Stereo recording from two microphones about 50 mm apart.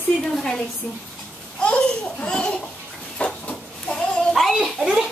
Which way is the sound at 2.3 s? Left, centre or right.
Centre.